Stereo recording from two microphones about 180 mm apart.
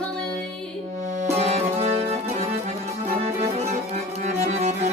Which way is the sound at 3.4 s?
40° right (ahead or behind).